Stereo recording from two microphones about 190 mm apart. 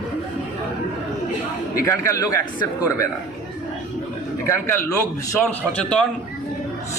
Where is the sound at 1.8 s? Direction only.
15° left (ahead or behind).